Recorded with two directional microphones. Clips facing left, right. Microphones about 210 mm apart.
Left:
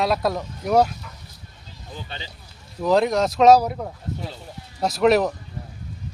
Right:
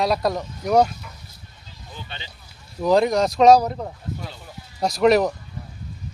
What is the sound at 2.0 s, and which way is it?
Speech, 35° left (ahead or behind).